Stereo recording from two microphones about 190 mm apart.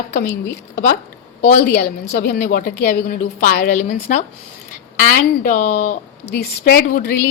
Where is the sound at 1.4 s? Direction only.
60° left (ahead or behind).